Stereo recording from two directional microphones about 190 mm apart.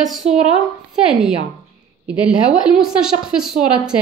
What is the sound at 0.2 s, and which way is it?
Speech, 35° right (ahead or behind).